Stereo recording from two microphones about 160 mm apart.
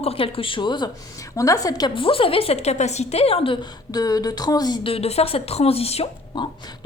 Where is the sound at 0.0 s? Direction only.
35° left (ahead or behind).